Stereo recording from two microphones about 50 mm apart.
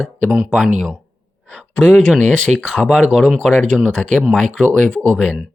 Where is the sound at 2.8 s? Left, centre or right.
Centre.